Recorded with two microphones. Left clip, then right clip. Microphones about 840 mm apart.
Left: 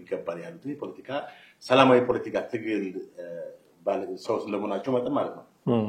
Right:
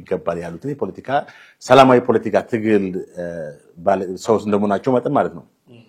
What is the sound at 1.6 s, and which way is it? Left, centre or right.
Speech, right.